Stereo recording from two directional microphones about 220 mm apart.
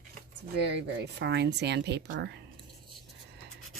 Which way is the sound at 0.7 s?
50° right (ahead or behind).